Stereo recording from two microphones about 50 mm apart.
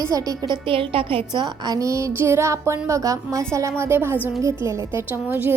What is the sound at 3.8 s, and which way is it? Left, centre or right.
Speech, right.